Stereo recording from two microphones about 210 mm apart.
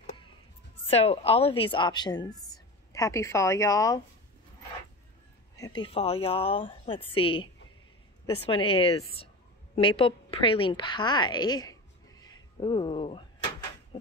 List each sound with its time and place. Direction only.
0.8 s a woman's voice: 30° left (ahead or behind)
5.6 s a woman's voice: 20° left (ahead or behind)